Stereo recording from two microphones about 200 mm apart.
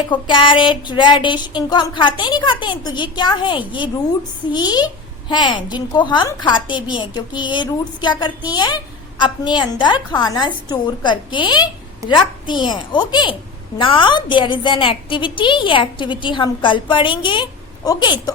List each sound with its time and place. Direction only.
0.1 s a woman's voice: 25° left (ahead or behind)